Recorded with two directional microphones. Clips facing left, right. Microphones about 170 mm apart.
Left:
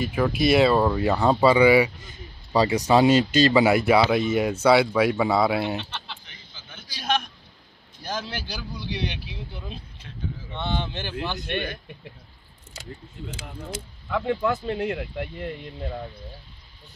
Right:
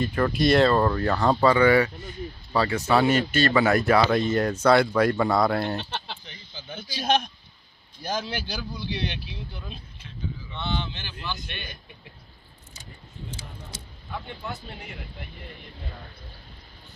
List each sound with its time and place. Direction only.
0.0 s speech: 5° left (ahead or behind)
5.8 s speech: 40° right (ahead or behind)
6.2 s a sound: 25° right (ahead or behind)
8.1 s speech: 5° left (ahead or behind)
10.5 s speech: 50° left (ahead or behind)
14.1 s speech: 90° left